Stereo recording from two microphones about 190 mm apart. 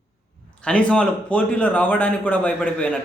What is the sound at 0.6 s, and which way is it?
A man's voice, 5° left (ahead or behind).